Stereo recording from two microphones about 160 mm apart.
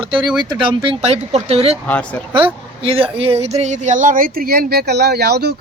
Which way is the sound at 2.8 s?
35° right (ahead or behind).